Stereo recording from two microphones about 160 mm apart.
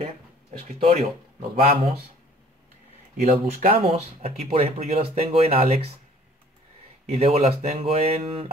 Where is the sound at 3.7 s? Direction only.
40° right (ahead or behind).